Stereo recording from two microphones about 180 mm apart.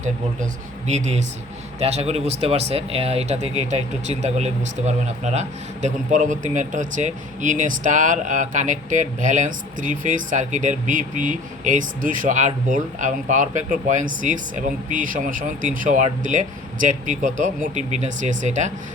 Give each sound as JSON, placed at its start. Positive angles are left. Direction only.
{"t": 0.9, "sound": "a man's voice", "side_deg": -40}